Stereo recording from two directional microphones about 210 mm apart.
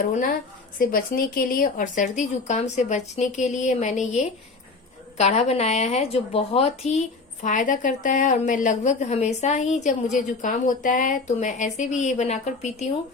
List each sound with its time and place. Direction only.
0.1 s speech: 40° left (ahead or behind)